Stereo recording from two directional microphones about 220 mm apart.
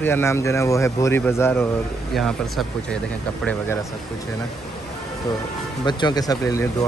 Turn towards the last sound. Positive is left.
turn(degrees=15)  # may be behind; listen again after turning